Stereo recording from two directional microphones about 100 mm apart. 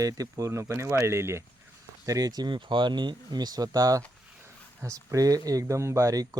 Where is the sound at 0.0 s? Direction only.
35° right (ahead or behind).